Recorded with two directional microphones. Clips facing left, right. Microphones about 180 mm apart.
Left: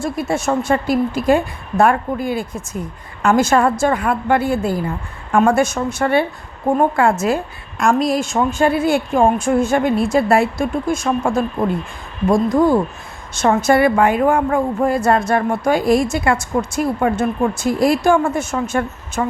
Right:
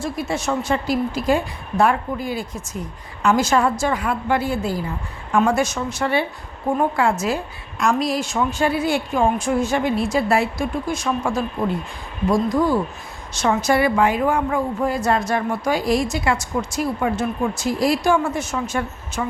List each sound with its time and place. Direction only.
0.0 s a woman's voice: 50° left (ahead or behind)